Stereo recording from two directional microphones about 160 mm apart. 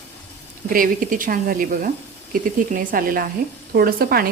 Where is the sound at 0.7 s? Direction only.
60° right (ahead or behind).